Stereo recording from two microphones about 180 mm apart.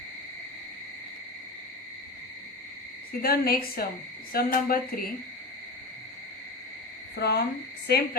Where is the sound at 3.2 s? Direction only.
55° left (ahead or behind).